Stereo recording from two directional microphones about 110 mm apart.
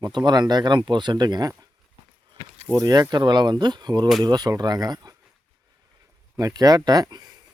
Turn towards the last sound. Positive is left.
turn(degrees=-40)  # may be behind; listen again after turning